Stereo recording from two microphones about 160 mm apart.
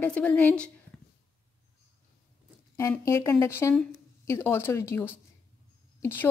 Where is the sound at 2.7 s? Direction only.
20° left (ahead or behind).